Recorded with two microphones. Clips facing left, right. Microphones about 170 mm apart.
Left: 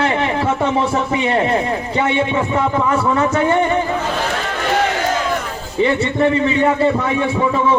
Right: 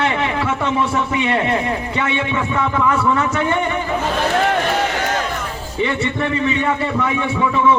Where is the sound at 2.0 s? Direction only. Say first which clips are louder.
Left 6 dB; 30° left (ahead or behind).